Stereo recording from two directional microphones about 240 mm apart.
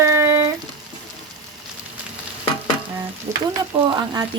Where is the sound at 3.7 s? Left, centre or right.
Right.